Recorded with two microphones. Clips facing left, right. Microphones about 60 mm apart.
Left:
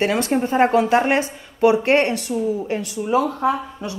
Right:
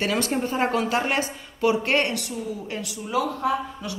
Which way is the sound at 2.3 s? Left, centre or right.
Left.